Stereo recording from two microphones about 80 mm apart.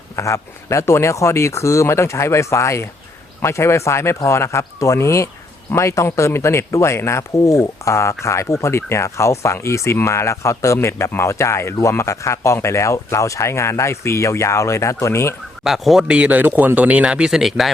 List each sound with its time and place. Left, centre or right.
0.2 s speech: left
15.6 s speech: centre
16.0 s speech: centre